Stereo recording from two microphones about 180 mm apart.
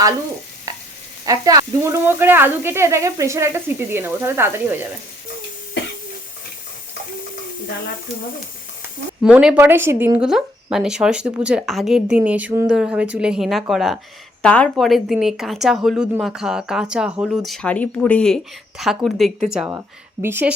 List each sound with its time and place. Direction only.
1.2 s speech: 20° right (ahead or behind)
9.2 s a woman's voice: 5° right (ahead or behind)